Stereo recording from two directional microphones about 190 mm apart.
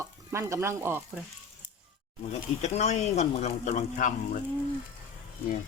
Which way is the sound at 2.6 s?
35° left (ahead or behind).